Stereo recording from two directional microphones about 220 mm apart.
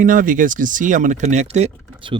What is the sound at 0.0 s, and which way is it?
Speech, 35° right (ahead or behind).